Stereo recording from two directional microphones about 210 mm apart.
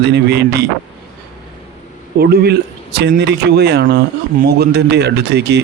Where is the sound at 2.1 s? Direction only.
50° right (ahead or behind).